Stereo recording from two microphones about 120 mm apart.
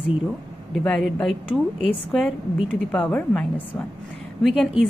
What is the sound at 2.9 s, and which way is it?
Speech, 15° left (ahead or behind).